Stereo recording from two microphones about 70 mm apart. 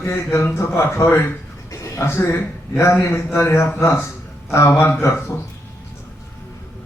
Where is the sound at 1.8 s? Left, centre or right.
Left.